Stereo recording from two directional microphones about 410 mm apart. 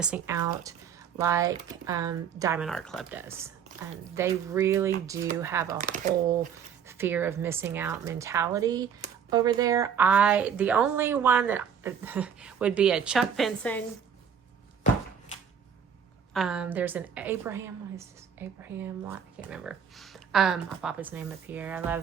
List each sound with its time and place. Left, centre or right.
0.0 s speech: centre
5.8 s speech: centre
6.8 s speech: centre
16.3 s speech: centre